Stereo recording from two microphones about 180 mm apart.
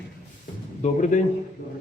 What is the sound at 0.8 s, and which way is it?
Speech, 45° left (ahead or behind).